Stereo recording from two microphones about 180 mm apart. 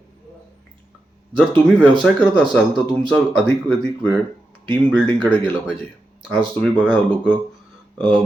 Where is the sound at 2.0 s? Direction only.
5° left (ahead or behind).